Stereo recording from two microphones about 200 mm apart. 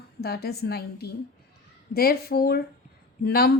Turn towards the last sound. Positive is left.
turn(degrees=50)  # may be behind; listen again after turning